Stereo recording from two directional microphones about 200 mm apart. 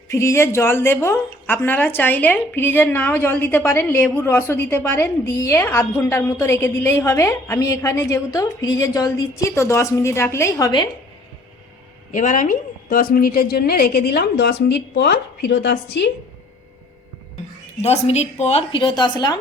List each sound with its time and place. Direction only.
0.1 s a woman's voice: 15° left (ahead or behind)
12.1 s a woman's voice: 40° left (ahead or behind); by 16.1 s 55° left (ahead or behind)
17.8 s a woman's voice: 35° left (ahead or behind)